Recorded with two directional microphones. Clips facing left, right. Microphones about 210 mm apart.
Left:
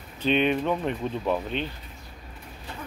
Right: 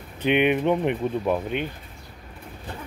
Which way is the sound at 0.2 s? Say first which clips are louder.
Right 3 dB; 15° right (ahead or behind).